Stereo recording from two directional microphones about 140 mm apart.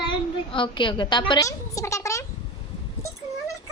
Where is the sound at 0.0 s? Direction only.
35° left (ahead or behind).